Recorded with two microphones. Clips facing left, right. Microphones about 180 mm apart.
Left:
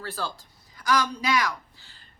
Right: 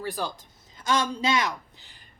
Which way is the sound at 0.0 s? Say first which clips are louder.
Right 2 dB; 15° right (ahead or behind).